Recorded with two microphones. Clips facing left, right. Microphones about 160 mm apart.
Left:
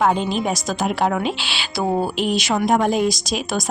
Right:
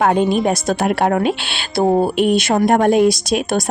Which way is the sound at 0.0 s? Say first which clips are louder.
Right 5 dB; 60° right (ahead or behind).